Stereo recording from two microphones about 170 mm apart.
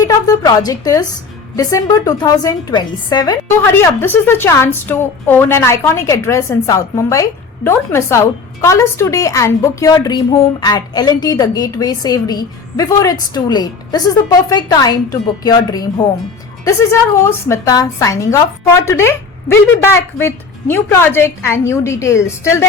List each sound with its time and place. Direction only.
0.0 s a woman's voice: 20° left (ahead or behind)